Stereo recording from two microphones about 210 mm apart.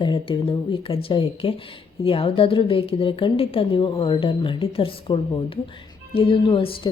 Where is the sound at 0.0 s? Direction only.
25° left (ahead or behind).